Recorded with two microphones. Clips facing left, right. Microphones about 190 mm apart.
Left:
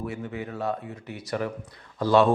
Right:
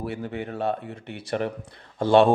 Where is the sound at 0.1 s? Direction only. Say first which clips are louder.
Right 2 dB; 30° right (ahead or behind).